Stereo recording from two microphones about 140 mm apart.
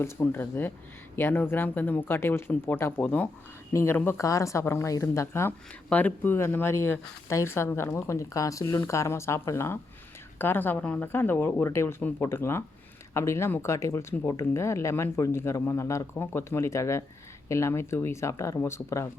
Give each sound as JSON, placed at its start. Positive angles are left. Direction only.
{"t": 0.0, "sound": "speech", "side_deg": 15}